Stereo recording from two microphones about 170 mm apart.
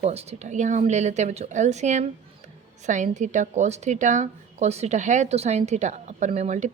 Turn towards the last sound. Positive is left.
turn(degrees=-40)  # may be behind; listen again after turning